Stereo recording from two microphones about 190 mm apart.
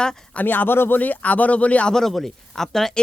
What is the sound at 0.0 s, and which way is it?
Speech, 5° left (ahead or behind).